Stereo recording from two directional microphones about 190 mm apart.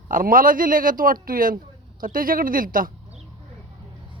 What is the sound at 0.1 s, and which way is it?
Speech, 45° right (ahead or behind).